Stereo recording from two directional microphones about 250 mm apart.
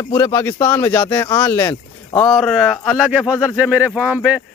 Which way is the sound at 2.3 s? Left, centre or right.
Centre.